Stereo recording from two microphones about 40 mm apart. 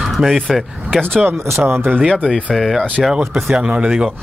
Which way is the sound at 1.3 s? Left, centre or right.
Right.